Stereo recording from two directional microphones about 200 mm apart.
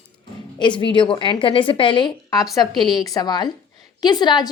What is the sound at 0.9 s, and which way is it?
A woman's voice, 25° left (ahead or behind).